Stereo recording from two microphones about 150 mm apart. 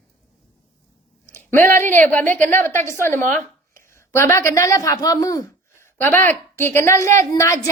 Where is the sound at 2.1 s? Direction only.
10° left (ahead or behind).